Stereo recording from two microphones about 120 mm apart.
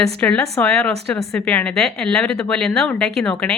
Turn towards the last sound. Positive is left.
turn(degrees=5)  # may be behind; listen again after turning